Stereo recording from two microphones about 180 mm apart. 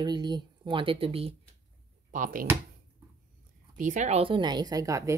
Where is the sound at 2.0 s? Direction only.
45° right (ahead or behind).